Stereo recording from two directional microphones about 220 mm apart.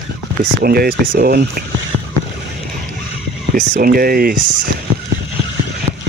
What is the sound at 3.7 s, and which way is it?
Speech, 40° right (ahead or behind).